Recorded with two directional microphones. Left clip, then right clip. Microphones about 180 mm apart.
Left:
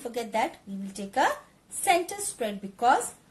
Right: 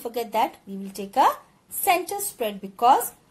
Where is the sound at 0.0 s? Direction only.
30° right (ahead or behind).